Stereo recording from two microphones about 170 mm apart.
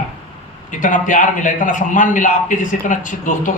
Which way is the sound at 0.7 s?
50° left (ahead or behind).